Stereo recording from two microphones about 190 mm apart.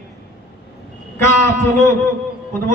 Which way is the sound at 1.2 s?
15° left (ahead or behind).